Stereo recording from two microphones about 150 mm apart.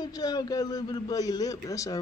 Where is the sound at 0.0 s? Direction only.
25° left (ahead or behind).